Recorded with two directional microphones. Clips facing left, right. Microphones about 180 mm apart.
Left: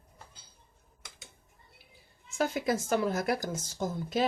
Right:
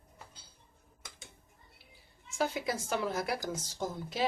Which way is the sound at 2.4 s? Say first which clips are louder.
Left 4 dB; 50° left (ahead or behind).